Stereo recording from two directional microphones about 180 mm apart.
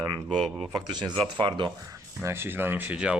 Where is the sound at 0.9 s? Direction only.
25° right (ahead or behind).